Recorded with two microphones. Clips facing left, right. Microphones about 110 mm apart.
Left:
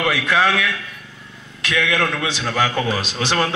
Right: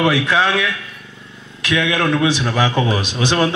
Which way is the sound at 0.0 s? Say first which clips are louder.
Right 2 dB; 25° right (ahead or behind).